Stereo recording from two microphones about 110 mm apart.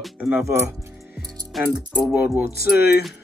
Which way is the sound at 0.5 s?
25° right (ahead or behind).